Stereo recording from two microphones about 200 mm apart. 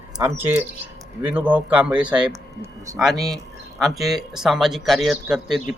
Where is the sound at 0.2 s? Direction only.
10° right (ahead or behind).